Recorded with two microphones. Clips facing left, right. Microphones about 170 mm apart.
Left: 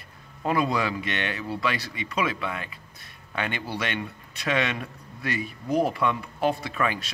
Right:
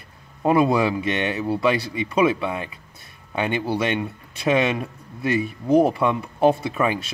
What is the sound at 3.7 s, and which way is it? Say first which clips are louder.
Speech: right 7 dB; 25° right (ahead or behind).